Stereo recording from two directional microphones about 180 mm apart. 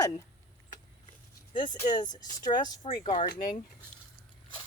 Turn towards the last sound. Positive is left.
turn(degrees=30)  # may be behind; listen again after turning